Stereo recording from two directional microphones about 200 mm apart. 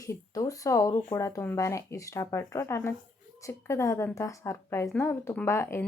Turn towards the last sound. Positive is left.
turn(degrees=10)  # may be behind; listen again after turning